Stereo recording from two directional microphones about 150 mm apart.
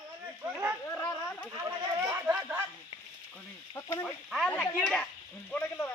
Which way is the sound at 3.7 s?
20° left (ahead or behind).